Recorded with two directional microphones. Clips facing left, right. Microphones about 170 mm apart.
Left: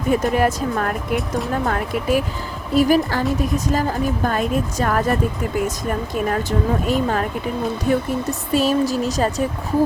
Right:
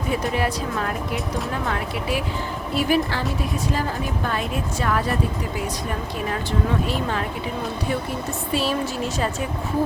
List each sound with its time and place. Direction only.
0.1 s a woman's voice: 45° left (ahead or behind)
6.1 s a woman's voice: 50° left (ahead or behind)